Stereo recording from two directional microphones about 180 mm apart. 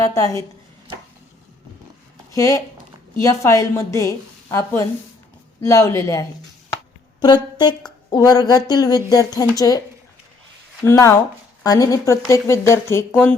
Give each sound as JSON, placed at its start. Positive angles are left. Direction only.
{"t": 0.1, "sound": "speech", "side_deg": 20}
{"t": 2.3, "sound": "a woman's voice", "side_deg": 20}
{"t": 10.8, "sound": "speech", "side_deg": 15}